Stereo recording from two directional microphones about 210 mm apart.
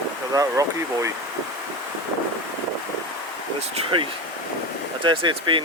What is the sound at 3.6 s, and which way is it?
Speech, 25° right (ahead or behind).